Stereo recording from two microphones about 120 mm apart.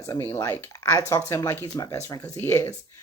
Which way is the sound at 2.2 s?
20° left (ahead or behind).